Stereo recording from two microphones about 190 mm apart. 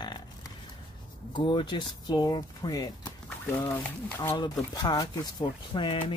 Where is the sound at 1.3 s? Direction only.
25° left (ahead or behind).